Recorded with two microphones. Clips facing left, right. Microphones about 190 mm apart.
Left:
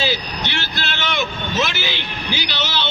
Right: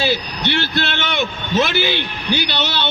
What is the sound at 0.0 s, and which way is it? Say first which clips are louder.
A man's voice: right 3 dB; 55° right (ahead or behind).